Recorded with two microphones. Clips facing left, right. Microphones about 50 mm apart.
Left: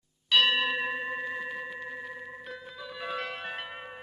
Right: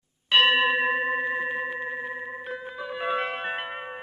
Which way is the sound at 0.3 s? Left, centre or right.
Right.